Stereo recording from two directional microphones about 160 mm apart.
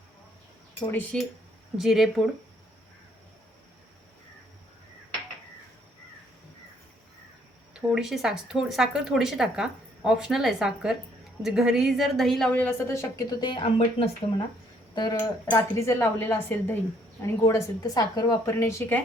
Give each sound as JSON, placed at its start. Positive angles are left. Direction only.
{"t": 0.9, "sound": "a woman's voice", "side_deg": 10}
{"t": 1.8, "sound": "speech", "side_deg": 0}
{"t": 7.7, "sound": "speech", "side_deg": -5}
{"t": 13.4, "sound": "a woman's voice", "side_deg": 30}